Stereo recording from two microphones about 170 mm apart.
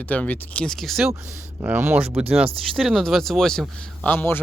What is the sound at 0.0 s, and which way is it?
A man's voice, 10° left (ahead or behind).